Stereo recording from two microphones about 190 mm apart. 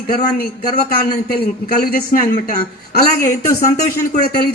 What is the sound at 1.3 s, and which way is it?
A man's voice, 50° left (ahead or behind).